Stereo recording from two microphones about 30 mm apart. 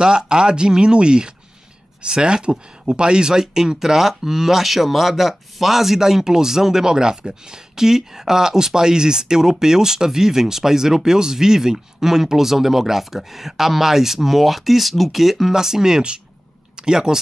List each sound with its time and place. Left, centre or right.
0.0 s speech: right; by 15.5 s centre
15.5 s speech: centre